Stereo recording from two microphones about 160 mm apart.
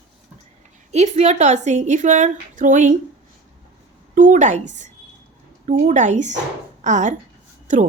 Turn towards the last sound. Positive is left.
turn(degrees=-50)  # may be behind; listen again after turning